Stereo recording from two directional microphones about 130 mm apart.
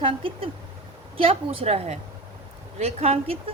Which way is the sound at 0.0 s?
45° right (ahead or behind).